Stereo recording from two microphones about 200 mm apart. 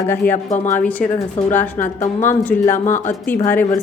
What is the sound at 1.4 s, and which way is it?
Speech, 35° left (ahead or behind).